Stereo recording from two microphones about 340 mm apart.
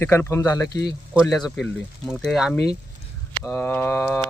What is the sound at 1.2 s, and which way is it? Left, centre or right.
Speech, centre.